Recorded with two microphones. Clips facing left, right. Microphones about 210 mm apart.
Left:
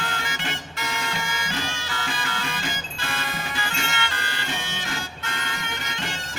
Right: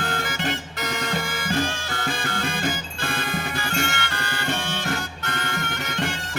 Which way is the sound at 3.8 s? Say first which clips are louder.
Right 4 dB; 55° right (ahead or behind).